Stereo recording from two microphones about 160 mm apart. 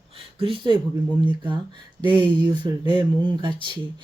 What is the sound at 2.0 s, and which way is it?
Speech, 30° right (ahead or behind).